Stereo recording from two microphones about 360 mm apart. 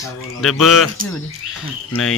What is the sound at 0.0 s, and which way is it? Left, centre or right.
Speech, centre.